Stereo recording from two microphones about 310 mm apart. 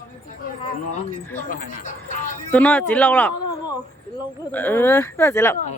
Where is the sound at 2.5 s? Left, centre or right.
Centre.